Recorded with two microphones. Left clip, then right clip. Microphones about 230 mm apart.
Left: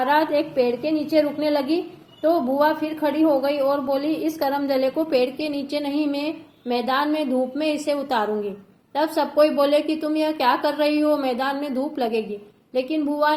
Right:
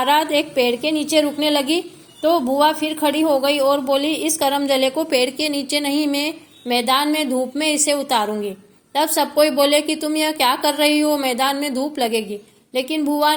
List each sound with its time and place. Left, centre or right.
0.0 s a woman's voice: right